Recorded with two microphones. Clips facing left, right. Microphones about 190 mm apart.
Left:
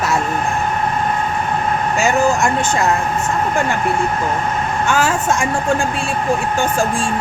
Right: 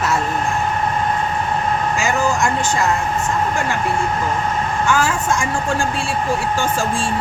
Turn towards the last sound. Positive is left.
turn(degrees=20)  # may be behind; listen again after turning